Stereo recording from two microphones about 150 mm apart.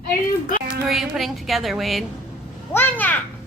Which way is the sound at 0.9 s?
Centre (ahead or behind).